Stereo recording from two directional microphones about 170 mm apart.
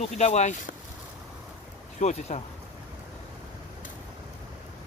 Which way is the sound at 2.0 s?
40° left (ahead or behind).